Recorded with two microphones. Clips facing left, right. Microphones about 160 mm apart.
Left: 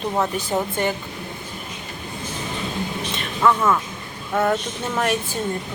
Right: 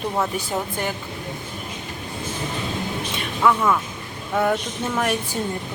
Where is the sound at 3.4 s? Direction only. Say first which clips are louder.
Left 1 dB; centre (ahead or behind).